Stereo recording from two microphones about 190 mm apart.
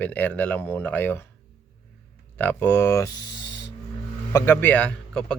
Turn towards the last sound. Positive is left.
turn(degrees=5)  # may be behind; listen again after turning